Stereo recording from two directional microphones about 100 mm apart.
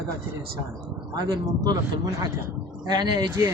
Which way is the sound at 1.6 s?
35° right (ahead or behind).